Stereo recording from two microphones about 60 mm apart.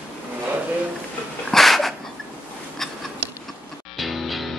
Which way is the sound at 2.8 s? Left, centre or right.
Centre.